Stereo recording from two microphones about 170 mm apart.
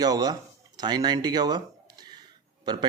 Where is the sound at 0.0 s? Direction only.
20° right (ahead or behind).